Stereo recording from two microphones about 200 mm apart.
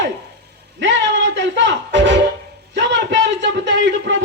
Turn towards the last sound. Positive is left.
turn(degrees=-65)  # may be behind; listen again after turning